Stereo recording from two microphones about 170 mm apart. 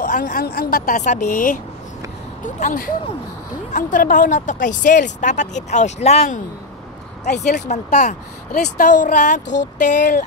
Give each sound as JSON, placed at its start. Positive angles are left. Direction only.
{"t": 0.0, "sound": "speech", "side_deg": 55}
{"t": 7.4, "sound": "speech", "side_deg": 45}